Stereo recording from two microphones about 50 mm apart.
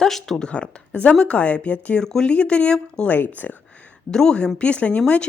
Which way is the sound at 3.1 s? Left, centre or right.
Left.